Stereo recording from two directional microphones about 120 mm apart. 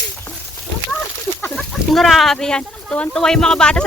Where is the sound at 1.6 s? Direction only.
Centre (ahead or behind).